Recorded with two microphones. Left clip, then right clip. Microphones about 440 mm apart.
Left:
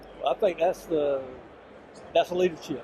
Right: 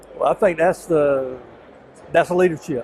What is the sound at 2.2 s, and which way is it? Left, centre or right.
Speech, right.